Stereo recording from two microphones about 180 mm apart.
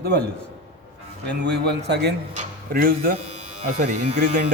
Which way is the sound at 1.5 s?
70° right (ahead or behind).